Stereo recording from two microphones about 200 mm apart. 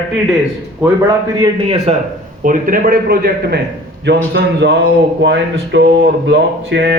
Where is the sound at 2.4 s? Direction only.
40° right (ahead or behind).